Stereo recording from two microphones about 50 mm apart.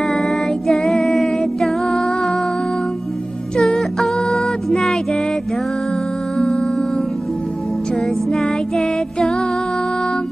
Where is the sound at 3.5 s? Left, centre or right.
Centre.